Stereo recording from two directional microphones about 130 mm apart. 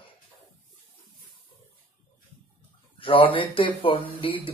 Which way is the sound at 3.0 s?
40° left (ahead or behind).